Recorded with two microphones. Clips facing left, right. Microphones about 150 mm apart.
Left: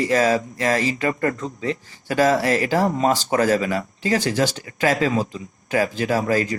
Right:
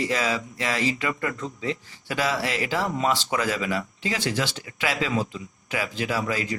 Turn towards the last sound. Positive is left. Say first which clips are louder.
# left 6 dB
turn(degrees=45)  # may be behind; listen again after turning